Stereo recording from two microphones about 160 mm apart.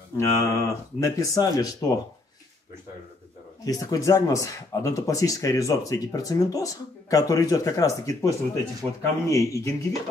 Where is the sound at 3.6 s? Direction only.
25° left (ahead or behind).